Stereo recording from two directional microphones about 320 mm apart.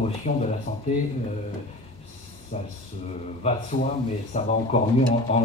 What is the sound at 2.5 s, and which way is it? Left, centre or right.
Speech, left.